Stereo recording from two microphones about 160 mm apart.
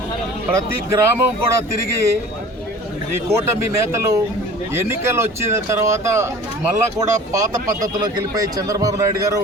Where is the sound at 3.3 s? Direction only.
15° right (ahead or behind).